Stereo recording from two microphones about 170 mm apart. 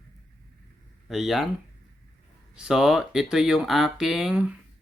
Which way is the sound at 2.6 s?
5° right (ahead or behind).